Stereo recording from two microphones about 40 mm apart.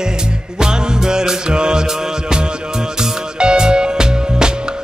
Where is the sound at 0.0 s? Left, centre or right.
Centre.